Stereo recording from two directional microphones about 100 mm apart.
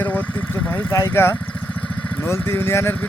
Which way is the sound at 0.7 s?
30° left (ahead or behind).